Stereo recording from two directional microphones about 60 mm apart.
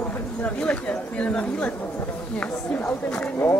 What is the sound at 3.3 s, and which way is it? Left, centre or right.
Speech, left.